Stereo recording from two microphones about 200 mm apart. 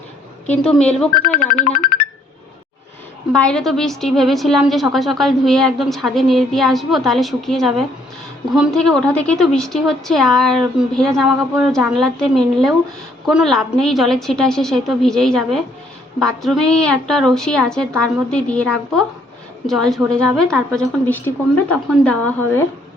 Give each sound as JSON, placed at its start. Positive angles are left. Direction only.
{"t": 0.4, "sound": "a woman's voice", "side_deg": 5}
{"t": 3.3, "sound": "a woman's voice", "side_deg": 5}